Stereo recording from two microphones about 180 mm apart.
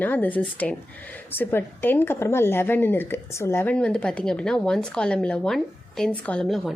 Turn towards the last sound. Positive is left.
turn(degrees=0)  # may be behind; listen again after turning